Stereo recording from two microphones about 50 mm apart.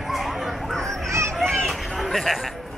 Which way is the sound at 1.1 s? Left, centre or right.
Right.